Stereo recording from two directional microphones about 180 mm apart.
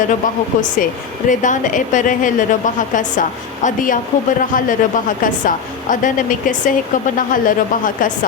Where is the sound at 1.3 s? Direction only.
45° left (ahead or behind).